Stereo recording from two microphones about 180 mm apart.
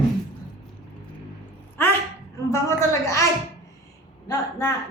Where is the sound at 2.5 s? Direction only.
15° left (ahead or behind).